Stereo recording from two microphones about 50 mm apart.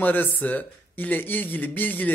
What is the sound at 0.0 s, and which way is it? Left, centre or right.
Speech, left.